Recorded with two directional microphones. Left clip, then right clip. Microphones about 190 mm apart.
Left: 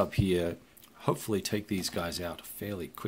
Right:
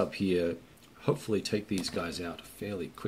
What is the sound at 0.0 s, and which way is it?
Speech, 50° left (ahead or behind).